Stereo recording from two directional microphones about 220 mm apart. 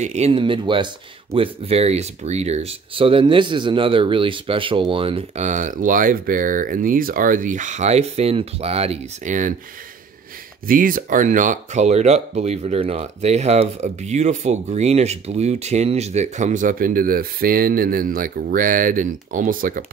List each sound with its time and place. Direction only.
0.0 s speech: 30° right (ahead or behind)
10.7 s speech: 40° right (ahead or behind)